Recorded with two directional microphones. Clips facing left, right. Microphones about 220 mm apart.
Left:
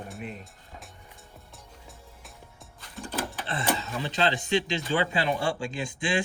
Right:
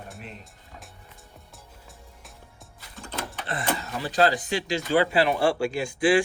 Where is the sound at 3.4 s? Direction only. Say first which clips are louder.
Right 1 dB; 30° left (ahead or behind).